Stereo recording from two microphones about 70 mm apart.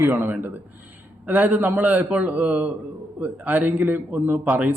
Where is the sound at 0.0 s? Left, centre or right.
Right.